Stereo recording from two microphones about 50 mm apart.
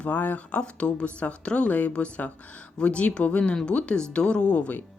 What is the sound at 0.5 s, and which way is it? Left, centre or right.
Speech, left.